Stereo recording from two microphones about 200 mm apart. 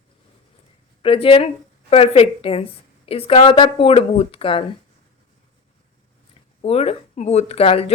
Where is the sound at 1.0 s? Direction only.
25° left (ahead or behind).